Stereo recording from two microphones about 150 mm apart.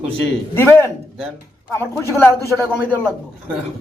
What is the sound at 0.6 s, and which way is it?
Speech, 15° left (ahead or behind).